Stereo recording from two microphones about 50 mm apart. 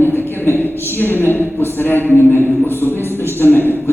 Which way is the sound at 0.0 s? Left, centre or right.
Left.